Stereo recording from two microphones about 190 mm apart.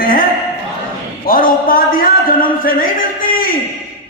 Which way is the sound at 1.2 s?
50° left (ahead or behind).